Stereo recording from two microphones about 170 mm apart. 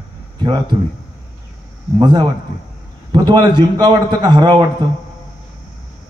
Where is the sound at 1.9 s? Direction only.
25° right (ahead or behind).